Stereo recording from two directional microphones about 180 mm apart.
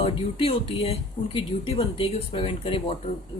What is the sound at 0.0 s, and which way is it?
Speech, 35° left (ahead or behind).